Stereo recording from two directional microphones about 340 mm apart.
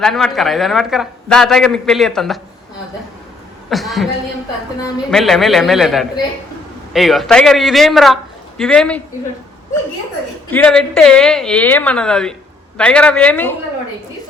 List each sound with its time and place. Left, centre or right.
0.0 s a man's voice: centre
3.7 s a man's voice: centre
10.5 s a man's voice: centre